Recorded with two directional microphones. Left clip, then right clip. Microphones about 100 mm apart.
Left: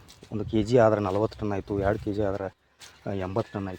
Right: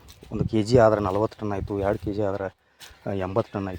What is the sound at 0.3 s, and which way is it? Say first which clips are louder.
Speech: right 2 dB; 25° right (ahead or behind).